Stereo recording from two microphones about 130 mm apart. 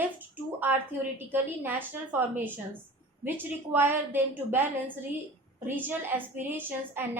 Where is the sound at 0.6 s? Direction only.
15° right (ahead or behind).